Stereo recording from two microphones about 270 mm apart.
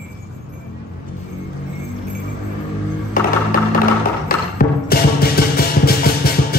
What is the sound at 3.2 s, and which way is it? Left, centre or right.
Music, left.